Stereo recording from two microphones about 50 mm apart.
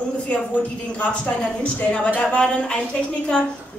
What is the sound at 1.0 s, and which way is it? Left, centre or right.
A woman's voice, left.